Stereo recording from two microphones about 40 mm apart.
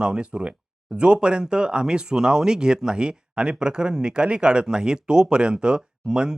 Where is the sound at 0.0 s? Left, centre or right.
Right.